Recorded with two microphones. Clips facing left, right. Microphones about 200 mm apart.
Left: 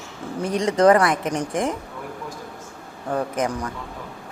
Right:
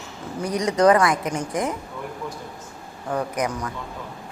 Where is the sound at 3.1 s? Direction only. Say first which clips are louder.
Left 1 dB; 30° left (ahead or behind).